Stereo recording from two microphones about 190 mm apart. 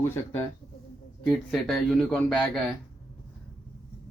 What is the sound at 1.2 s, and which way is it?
A man's voice, 5° left (ahead or behind).